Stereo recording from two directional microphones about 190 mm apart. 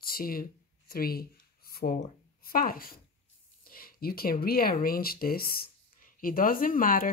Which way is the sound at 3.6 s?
50° left (ahead or behind).